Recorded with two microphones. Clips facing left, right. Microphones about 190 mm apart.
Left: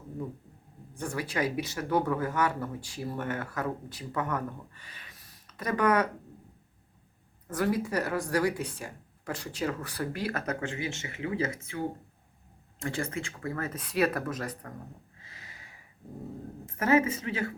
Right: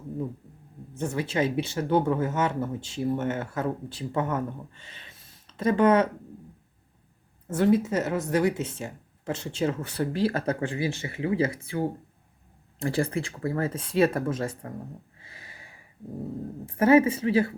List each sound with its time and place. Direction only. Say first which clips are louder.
0.9 s speech: right 5 dB; 25° right (ahead or behind)
7.4 s speech: right 7 dB; 25° right (ahead or behind)
15.2 s a sound: right 3 dB; 30° right (ahead or behind)
16.6 s speech: right 6 dB; 30° right (ahead or behind)